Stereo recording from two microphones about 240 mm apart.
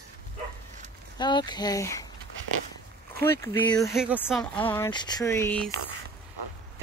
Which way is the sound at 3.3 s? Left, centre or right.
Centre.